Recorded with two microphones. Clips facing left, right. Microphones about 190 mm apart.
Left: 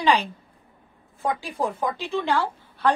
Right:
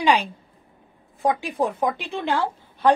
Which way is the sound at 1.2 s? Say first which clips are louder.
Right 4 dB; 20° right (ahead or behind).